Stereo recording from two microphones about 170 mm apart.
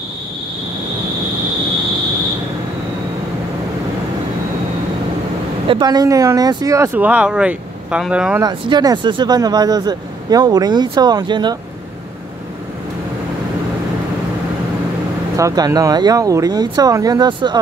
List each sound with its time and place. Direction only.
5.7 s speech: 25° right (ahead or behind); by 8.4 s 5° right (ahead or behind)
8.4 s speech: 25° right (ahead or behind)
15.3 s speech: 20° right (ahead or behind)